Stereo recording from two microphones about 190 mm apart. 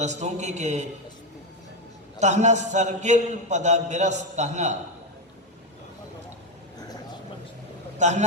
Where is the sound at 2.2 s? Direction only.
40° right (ahead or behind).